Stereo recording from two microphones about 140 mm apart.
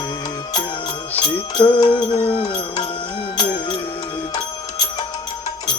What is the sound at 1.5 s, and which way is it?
Music, 40° left (ahead or behind).